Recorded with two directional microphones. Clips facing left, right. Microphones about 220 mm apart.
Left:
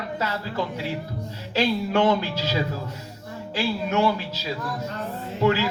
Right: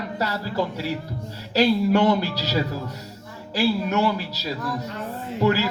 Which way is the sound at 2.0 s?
40° right (ahead or behind).